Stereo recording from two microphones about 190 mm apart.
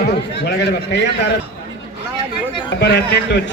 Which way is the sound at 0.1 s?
60° left (ahead or behind).